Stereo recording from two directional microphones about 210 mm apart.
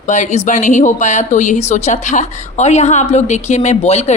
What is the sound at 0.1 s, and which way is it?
Speech, 35° left (ahead or behind).